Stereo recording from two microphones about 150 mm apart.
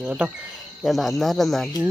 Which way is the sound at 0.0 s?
5° right (ahead or behind).